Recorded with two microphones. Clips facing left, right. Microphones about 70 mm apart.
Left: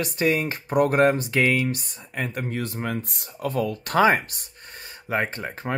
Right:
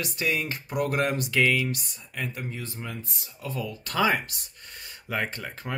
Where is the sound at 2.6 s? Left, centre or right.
Left.